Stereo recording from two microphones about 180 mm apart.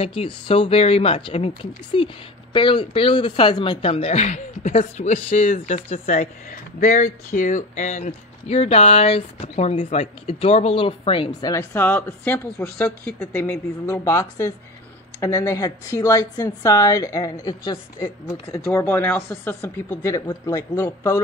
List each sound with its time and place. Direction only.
0.0 s speech: 30° left (ahead or behind)
11.5 s a woman's voice: 10° left (ahead or behind)
18.7 s speech: 10° left (ahead or behind)